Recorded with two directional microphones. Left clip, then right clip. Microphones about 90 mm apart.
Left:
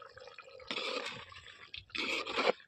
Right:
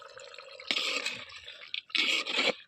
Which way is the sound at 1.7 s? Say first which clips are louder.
Right 9 dB; 25° left (ahead or behind).